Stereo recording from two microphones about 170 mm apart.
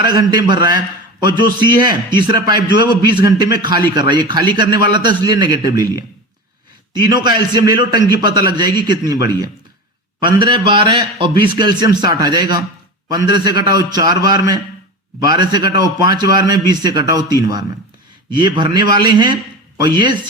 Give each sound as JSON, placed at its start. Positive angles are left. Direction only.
{"t": 0.2, "sound": "a man's voice", "side_deg": -25}
{"t": 6.9, "sound": "a man's voice", "side_deg": -25}